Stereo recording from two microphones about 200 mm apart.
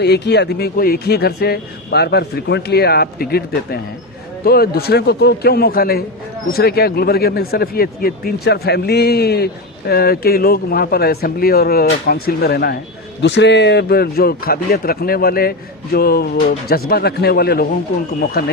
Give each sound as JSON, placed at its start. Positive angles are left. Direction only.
{"t": 0.0, "sound": "speech", "side_deg": 55}